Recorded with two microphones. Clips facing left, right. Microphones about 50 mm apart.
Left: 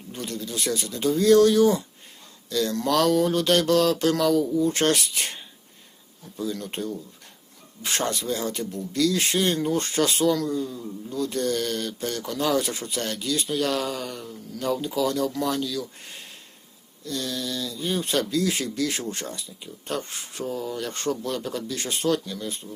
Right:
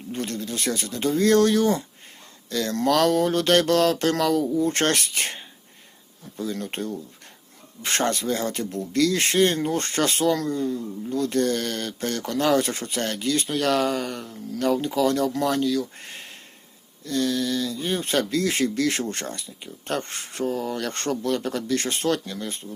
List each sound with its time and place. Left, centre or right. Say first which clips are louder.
0.1 s speech: right 3 dB; right
6.4 s speech: right 1 dB; right